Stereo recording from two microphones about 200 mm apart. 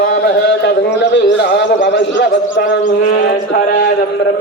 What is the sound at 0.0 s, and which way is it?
Speech, 55° left (ahead or behind).